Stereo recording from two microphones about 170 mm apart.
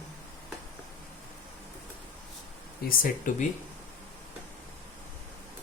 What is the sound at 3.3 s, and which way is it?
Speech, 50° left (ahead or behind).